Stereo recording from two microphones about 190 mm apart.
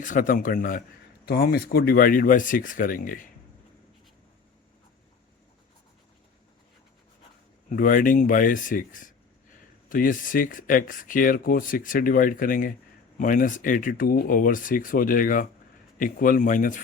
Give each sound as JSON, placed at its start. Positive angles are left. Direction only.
{"t": 0.0, "sound": "speech", "side_deg": 45}
{"t": 7.7, "sound": "speech", "side_deg": 45}